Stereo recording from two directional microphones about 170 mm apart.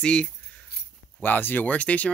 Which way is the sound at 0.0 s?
5° left (ahead or behind).